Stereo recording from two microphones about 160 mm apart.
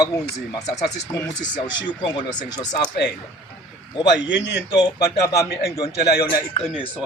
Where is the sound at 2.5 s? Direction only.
25° left (ahead or behind).